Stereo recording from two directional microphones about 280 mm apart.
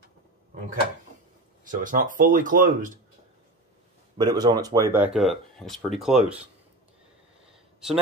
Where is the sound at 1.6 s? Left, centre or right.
Right.